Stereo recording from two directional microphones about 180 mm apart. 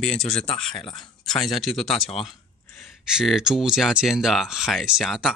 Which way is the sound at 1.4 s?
Centre (ahead or behind).